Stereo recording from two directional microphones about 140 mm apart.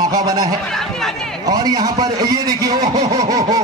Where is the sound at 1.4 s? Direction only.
25° right (ahead or behind).